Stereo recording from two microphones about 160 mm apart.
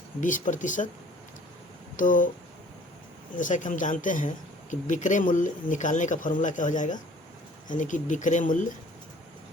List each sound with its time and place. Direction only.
0.2 s speech: 55° left (ahead or behind)
2.0 s speech: 55° left (ahead or behind)
3.3 s speech: 55° left (ahead or behind)